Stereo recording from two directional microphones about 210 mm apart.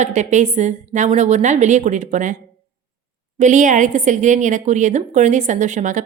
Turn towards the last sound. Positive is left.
turn(degrees=-35)  # may be behind; listen again after turning